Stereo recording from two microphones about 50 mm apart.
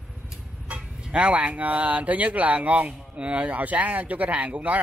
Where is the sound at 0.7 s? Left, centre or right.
Right.